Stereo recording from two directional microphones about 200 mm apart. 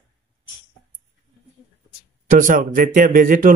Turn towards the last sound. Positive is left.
turn(degrees=-40)  # may be behind; listen again after turning